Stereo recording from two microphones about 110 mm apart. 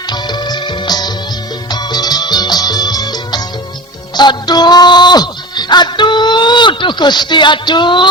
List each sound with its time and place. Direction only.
0.1 s music: 40° left (ahead or behind)